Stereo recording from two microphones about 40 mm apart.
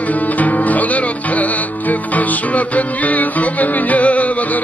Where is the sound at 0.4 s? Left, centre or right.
Left.